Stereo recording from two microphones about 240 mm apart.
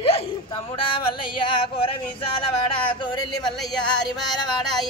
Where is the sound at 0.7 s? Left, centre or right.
Left.